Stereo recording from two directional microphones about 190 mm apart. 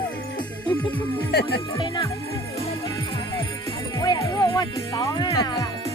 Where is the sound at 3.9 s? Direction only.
20° left (ahead or behind).